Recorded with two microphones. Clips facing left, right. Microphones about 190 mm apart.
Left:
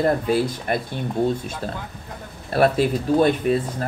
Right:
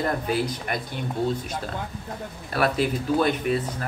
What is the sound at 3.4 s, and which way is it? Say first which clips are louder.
Speech: left 4 dB; 35° left (ahead or behind).